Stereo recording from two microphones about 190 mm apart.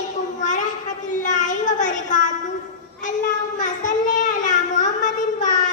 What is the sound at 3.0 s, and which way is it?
Child singing, 40° left (ahead or behind).